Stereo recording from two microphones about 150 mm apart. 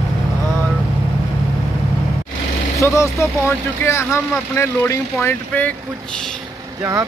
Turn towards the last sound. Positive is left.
turn(degrees=15)  # may be behind; listen again after turning